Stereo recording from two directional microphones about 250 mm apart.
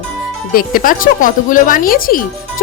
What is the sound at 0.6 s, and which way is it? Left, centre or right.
Speech, left.